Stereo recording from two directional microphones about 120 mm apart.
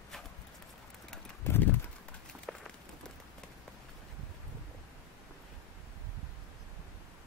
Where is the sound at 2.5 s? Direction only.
Centre (ahead or behind).